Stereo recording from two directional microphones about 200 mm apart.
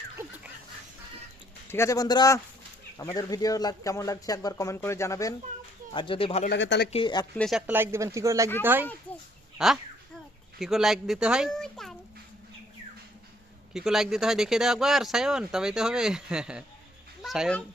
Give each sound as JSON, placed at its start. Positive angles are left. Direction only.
{"t": 0.2, "sound": "a sound", "side_deg": -10}
{"t": 1.6, "sound": "speech", "side_deg": 15}
{"t": 5.9, "sound": "speech", "side_deg": 25}
{"t": 6.5, "sound": "speech", "side_deg": 60}
{"t": 6.9, "sound": "speech", "side_deg": 25}
{"t": 7.3, "sound": "speech", "side_deg": 0}
{"t": 7.7, "sound": "speech", "side_deg": -10}
{"t": 13.7, "sound": "speech", "side_deg": 0}